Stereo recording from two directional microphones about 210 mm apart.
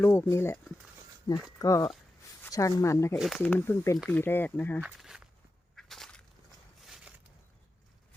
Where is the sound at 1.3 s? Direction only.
20° left (ahead or behind).